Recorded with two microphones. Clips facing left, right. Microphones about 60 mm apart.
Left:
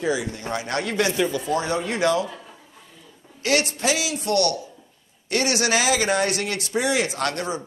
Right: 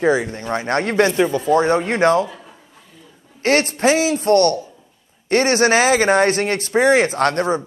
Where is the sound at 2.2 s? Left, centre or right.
Centre.